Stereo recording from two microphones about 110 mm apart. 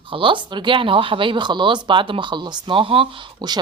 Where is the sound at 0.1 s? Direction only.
50° right (ahead or behind).